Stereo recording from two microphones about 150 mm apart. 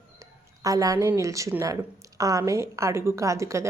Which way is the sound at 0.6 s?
25° right (ahead or behind).